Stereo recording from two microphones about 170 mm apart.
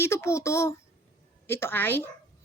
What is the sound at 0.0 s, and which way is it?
Speech, 15° left (ahead or behind).